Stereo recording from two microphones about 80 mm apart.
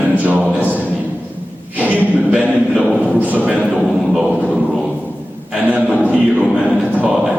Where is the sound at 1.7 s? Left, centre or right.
Centre.